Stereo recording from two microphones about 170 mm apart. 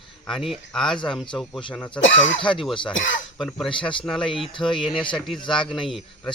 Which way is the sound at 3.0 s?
90° left.